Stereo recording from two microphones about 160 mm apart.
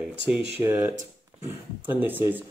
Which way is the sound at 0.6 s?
10° right (ahead or behind).